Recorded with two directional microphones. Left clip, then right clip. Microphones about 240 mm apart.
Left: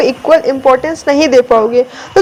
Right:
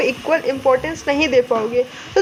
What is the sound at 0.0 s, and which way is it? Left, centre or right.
Speech, centre.